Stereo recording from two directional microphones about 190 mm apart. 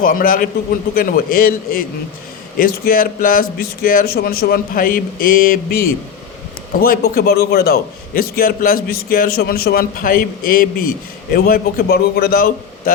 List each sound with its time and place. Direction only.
0.0 s a man's voice: 45° left (ahead or behind)